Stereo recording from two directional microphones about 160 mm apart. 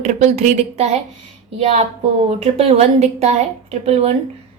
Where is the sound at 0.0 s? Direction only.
45° right (ahead or behind).